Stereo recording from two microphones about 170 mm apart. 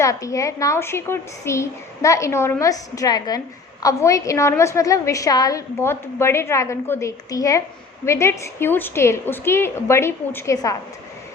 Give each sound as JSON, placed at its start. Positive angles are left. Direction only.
{"t": 0.0, "sound": "a woman's voice", "side_deg": 20}